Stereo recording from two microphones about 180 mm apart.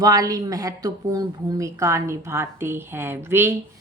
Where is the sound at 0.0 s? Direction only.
20° right (ahead or behind).